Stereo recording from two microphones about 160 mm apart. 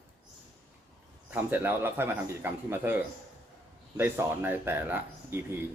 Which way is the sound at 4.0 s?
15° right (ahead or behind).